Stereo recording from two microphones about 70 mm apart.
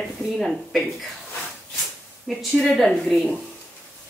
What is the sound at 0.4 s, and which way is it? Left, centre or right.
Speech, centre.